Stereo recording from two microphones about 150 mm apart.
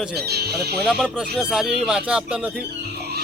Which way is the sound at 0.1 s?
90° right.